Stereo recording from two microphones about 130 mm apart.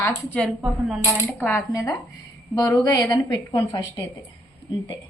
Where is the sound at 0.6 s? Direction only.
Centre (ahead or behind).